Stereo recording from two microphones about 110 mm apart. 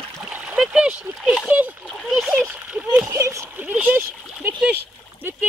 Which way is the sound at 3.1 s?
25° right (ahead or behind).